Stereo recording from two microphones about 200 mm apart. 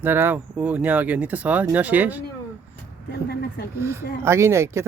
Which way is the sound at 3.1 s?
55° left (ahead or behind).